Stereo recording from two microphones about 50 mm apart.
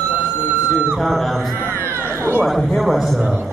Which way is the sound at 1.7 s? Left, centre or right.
Right.